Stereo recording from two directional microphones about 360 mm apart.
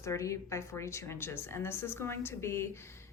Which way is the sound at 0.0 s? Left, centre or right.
Centre.